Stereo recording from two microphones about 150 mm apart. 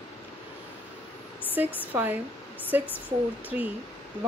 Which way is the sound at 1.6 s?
10° right (ahead or behind).